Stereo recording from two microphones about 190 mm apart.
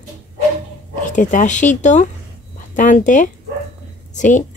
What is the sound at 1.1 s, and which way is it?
Speech, 40° left (ahead or behind).